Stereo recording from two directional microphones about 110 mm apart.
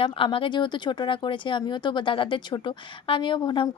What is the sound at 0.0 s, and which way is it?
Speech, 55° left (ahead or behind).